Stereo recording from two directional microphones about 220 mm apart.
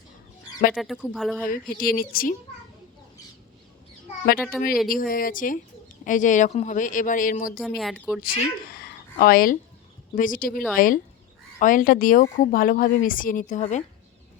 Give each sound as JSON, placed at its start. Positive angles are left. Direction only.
{"t": 0.7, "sound": "a woman's voice", "side_deg": 0}
{"t": 1.5, "sound": "speech", "side_deg": 40}
{"t": 4.5, "sound": "a woman's voice", "side_deg": 0}
{"t": 4.9, "sound": "speech", "side_deg": 40}
{"t": 7.8, "sound": "a woman's voice", "side_deg": 0}
{"t": 8.7, "sound": "a sound", "side_deg": 45}
{"t": 10.2, "sound": "speech", "side_deg": 40}